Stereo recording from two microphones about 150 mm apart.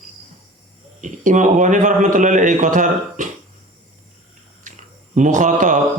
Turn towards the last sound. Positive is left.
turn(degrees=-55)  # may be behind; listen again after turning